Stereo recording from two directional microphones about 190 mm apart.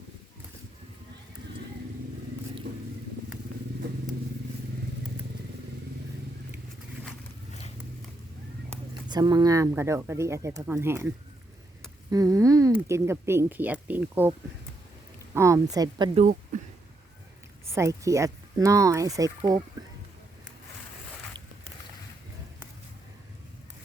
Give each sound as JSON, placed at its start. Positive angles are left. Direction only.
{"t": 9.0, "sound": "speech", "side_deg": -20}
{"t": 12.1, "sound": "speech", "side_deg": -20}
{"t": 15.4, "sound": "a woman's voice", "side_deg": -15}
{"t": 16.1, "sound": "speech", "side_deg": -40}
{"t": 17.7, "sound": "speech", "side_deg": -15}